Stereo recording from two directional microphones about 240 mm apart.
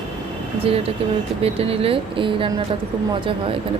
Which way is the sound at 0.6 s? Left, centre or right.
Right.